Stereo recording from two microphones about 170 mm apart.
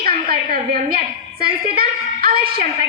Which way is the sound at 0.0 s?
60° right (ahead or behind).